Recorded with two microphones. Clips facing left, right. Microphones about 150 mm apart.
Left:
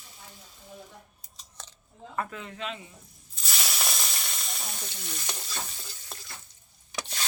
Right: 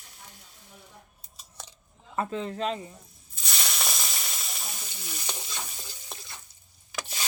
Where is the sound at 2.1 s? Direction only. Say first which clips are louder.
Right 5 dB; 30° right (ahead or behind).